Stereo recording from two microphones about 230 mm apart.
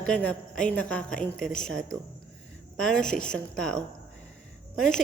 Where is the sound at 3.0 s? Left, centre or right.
Left.